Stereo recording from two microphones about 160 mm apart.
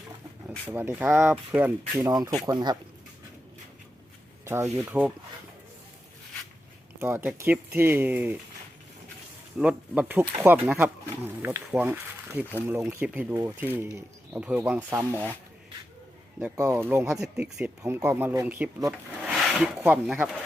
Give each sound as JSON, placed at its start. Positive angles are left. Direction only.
{"t": 0.7, "sound": "speech", "side_deg": -15}
{"t": 2.5, "sound": "speech", "side_deg": -25}
{"t": 4.4, "sound": "speech", "side_deg": -15}
{"t": 7.0, "sound": "speech", "side_deg": -15}
{"t": 9.6, "sound": "speech", "side_deg": -5}
{"t": 16.4, "sound": "speech", "side_deg": -15}